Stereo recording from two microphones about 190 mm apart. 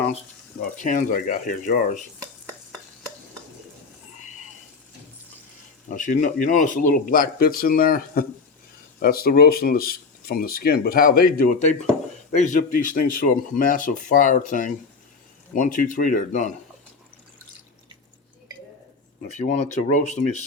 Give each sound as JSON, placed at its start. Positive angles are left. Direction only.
{"t": 0.6, "sound": "speech", "side_deg": 45}
{"t": 5.9, "sound": "speech", "side_deg": 45}
{"t": 19.3, "sound": "speech", "side_deg": 40}